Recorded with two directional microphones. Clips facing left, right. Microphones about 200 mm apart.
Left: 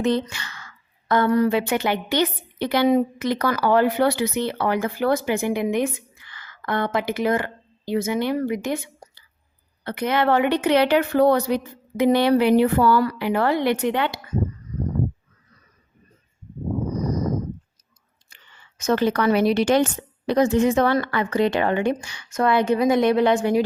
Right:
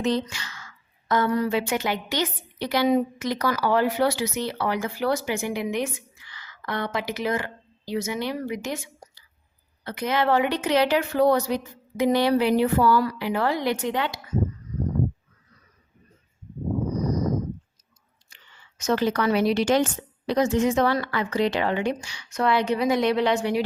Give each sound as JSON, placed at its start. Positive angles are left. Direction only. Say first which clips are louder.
{"t": 0.0, "sound": "a woman's voice", "louder": "left 3 dB", "side_deg": 55}
{"t": 18.3, "sound": "whispering", "louder": "left 1 dB", "side_deg": 55}
{"t": 18.8, "sound": "a woman's voice", "louder": "left 3 dB", "side_deg": 55}